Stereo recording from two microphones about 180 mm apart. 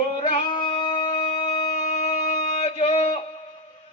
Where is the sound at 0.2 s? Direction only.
30° left (ahead or behind).